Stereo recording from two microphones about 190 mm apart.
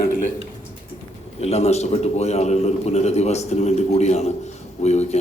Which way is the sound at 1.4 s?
35° left (ahead or behind).